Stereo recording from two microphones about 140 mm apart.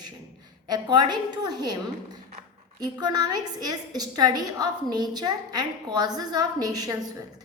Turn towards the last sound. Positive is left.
turn(degrees=-25)  # may be behind; listen again after turning